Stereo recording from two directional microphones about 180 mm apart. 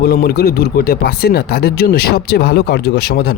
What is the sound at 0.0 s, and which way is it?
Speech, 60° left (ahead or behind).